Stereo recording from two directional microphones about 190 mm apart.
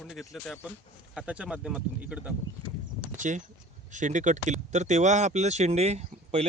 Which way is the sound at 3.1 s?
40° right (ahead or behind).